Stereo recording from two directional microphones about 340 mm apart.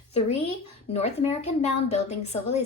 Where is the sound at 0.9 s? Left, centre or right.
Centre.